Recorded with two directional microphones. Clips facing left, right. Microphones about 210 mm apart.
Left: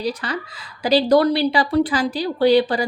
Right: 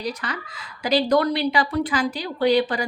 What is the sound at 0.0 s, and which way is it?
A woman's voice, 30° left (ahead or behind).